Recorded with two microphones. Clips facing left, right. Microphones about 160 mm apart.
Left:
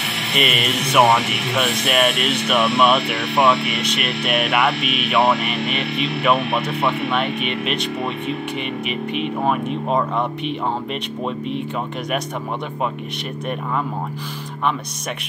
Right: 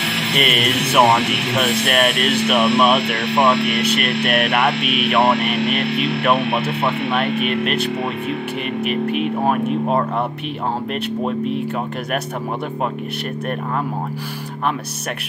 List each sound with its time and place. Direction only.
0.4 s speech: centre (ahead or behind)
4.3 s speech: 5° right (ahead or behind)
9.1 s speech: 5° right (ahead or behind)
11.2 s speech: 5° right (ahead or behind)